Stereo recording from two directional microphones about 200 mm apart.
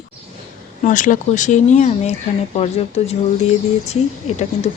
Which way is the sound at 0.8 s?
40° left (ahead or behind).